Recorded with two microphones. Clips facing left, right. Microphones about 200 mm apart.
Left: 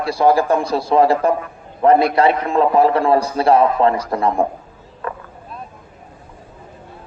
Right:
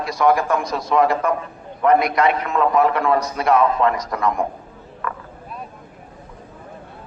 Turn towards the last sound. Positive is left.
turn(degrees=30)  # may be behind; listen again after turning